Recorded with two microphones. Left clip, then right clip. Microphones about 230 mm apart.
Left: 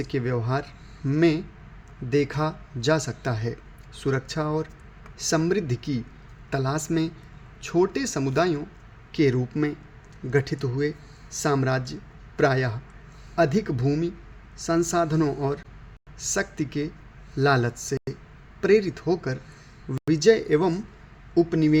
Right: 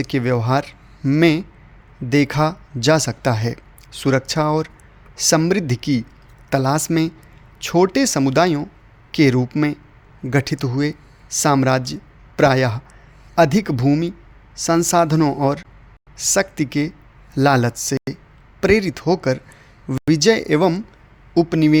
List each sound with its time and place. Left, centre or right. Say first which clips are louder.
0.0 s speech: right 8 dB; right